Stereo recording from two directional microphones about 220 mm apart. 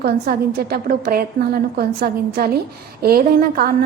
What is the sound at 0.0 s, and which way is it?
A woman's voice, 45° right (ahead or behind).